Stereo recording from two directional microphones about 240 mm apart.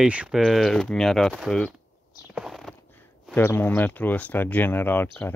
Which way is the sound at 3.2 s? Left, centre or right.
Centre.